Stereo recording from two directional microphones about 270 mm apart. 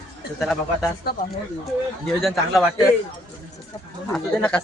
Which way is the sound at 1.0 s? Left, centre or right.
Left.